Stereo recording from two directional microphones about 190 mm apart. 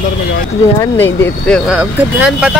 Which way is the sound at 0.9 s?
10° left (ahead or behind).